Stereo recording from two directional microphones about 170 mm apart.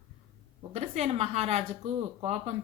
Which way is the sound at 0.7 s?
40° right (ahead or behind).